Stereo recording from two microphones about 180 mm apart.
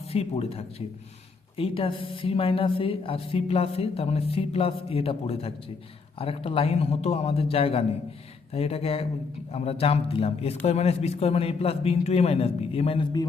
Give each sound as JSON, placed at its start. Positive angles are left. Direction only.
{"t": 0.1, "sound": "a woman's voice", "side_deg": 35}